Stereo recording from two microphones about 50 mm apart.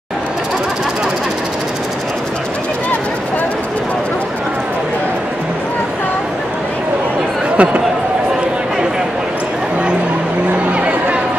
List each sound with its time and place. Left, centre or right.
7.5 s speech: right